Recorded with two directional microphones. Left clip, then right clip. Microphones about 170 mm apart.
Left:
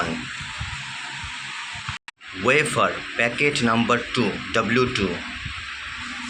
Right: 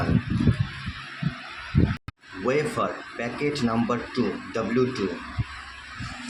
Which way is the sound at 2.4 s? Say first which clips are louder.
Left 6 dB; centre (ahead or behind).